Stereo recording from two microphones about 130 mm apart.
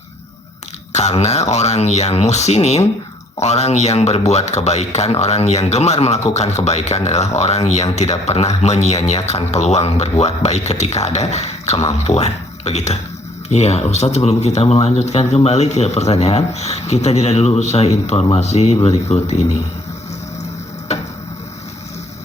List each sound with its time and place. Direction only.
0.9 s speech: 60° left (ahead or behind)